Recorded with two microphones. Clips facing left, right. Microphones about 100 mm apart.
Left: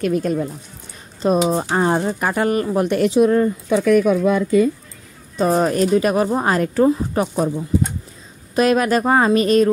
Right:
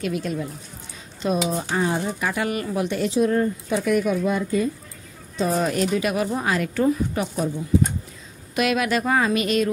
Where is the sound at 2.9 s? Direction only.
65° left (ahead or behind).